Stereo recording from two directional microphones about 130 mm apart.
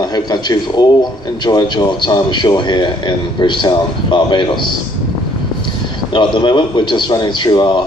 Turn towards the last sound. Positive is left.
turn(degrees=35)  # may be behind; listen again after turning